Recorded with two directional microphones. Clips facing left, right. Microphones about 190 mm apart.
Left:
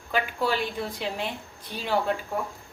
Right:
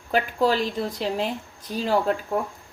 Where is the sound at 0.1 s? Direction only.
40° right (ahead or behind).